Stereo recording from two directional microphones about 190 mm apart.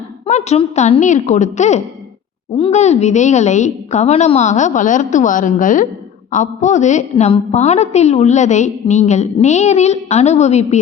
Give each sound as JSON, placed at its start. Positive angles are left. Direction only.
{"t": 0.3, "sound": "a woman's voice", "side_deg": 35}